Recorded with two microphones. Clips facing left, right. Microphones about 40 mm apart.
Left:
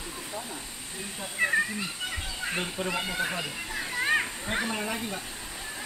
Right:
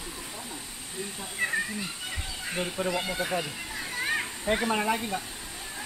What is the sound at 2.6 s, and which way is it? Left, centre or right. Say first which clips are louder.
Speech: right 2 dB; centre.